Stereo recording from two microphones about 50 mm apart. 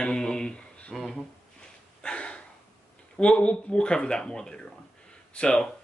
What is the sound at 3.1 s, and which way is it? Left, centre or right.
Speech, left.